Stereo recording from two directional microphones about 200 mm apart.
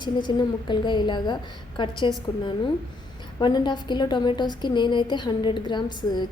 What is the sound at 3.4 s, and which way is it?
A woman's voice, 20° left (ahead or behind).